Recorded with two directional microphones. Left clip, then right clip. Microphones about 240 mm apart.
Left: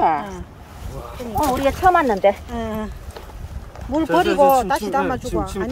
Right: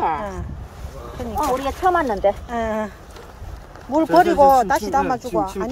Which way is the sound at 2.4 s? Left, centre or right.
Centre.